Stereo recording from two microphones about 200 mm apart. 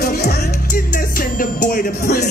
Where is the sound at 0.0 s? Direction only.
50° left (ahead or behind).